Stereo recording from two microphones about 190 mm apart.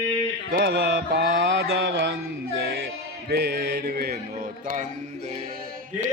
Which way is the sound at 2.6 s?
55° right (ahead or behind).